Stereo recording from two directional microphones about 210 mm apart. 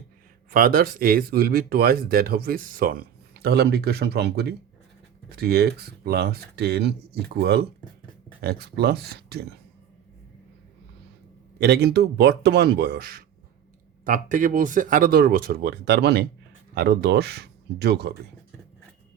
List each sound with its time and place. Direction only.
0.5 s speech: 45° right (ahead or behind)
11.6 s speech: 50° right (ahead or behind)